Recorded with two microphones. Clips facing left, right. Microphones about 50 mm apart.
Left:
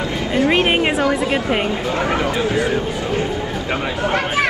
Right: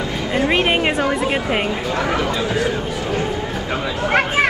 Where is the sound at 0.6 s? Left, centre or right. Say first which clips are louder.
Left 1 dB; centre.